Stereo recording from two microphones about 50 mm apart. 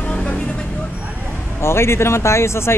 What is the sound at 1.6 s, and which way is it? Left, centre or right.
Speech, left.